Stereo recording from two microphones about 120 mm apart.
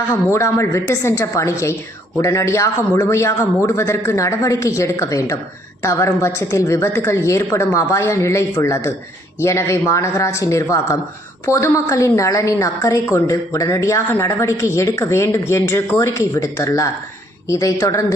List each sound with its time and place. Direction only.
0.3 s a woman's voice: 25° left (ahead or behind)